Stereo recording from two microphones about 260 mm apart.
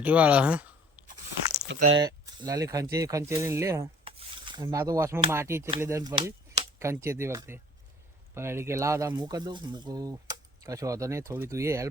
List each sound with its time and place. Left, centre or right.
0.0 s speech: centre
1.6 s speech: right
2.0 s speech: centre
2.9 s rub: centre
5.8 s speech: centre